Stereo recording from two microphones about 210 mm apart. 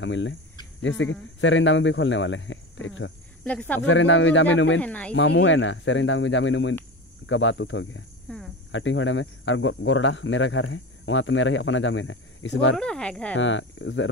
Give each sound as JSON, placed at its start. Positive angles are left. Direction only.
{"t": 0.0, "sound": "speech", "side_deg": 60}
{"t": 3.4, "sound": "speech", "side_deg": 5}
{"t": 3.8, "sound": "speech", "side_deg": 65}
{"t": 4.7, "sound": "speech", "side_deg": 5}
{"t": 5.1, "sound": "speech", "side_deg": 55}
{"t": 8.3, "sound": "cricket", "side_deg": 5}
{"t": 8.7, "sound": "speech", "side_deg": 65}
{"t": 12.7, "sound": "speech", "side_deg": 5}
{"t": 13.4, "sound": "speech", "side_deg": 60}